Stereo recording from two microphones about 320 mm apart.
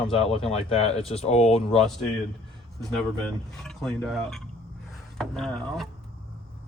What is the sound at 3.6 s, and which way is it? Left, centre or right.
Speech, centre.